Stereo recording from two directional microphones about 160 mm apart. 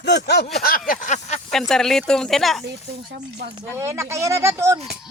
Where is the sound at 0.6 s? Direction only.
60° left (ahead or behind).